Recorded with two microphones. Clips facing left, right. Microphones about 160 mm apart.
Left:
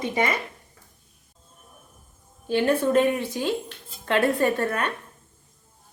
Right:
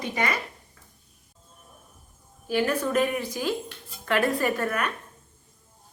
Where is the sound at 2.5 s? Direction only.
25° left (ahead or behind).